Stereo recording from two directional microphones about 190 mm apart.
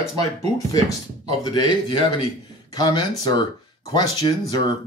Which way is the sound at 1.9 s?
25° left (ahead or behind).